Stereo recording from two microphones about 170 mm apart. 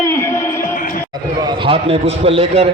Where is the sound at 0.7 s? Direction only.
55° left (ahead or behind).